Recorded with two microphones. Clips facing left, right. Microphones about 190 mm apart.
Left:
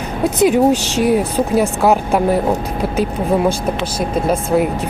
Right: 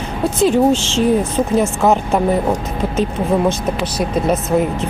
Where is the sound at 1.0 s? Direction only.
10° left (ahead or behind).